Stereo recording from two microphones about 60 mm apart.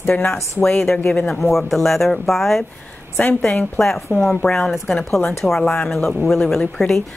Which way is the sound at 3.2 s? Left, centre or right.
Left.